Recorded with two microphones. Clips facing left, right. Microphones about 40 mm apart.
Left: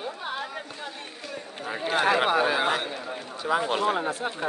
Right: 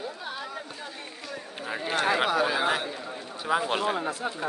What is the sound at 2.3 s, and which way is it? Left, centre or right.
Speech, centre.